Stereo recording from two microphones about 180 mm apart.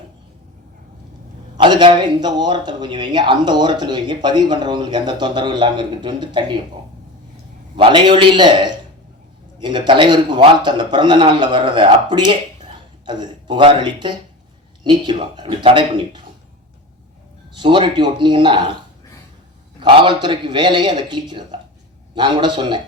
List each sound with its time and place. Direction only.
1.5 s speech: 25° right (ahead or behind)
7.8 s speech: 25° right (ahead or behind)
17.6 s speech: 25° right (ahead or behind)
19.8 s speech: 25° right (ahead or behind)